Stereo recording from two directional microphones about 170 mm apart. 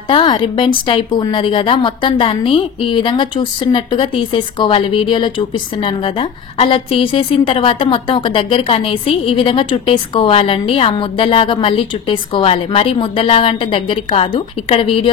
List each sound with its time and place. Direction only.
0.1 s a woman's voice: 25° left (ahead or behind)